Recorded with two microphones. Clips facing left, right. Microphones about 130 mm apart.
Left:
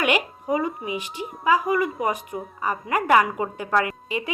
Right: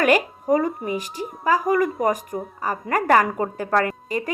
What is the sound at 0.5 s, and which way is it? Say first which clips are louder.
A woman's voice: right 4 dB; 45° right (ahead or behind).